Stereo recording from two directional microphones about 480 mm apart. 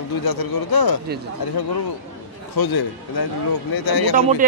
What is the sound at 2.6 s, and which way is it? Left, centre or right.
Speech, left.